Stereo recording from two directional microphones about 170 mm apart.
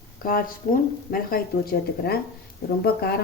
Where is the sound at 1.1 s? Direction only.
60° left (ahead or behind).